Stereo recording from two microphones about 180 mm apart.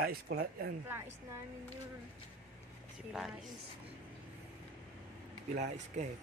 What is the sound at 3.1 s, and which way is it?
Speech, centre (ahead or behind).